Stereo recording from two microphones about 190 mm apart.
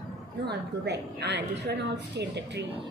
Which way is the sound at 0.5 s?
60° right (ahead or behind).